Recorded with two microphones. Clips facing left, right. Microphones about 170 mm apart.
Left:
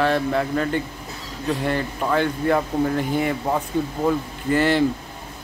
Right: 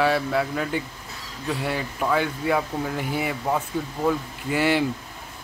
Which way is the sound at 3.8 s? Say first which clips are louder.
Left 6 dB; 20° left (ahead or behind).